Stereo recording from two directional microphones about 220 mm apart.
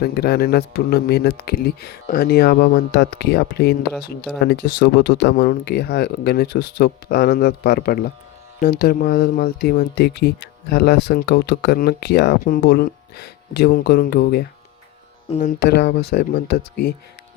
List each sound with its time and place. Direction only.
0.0 s speech: 45° left (ahead or behind)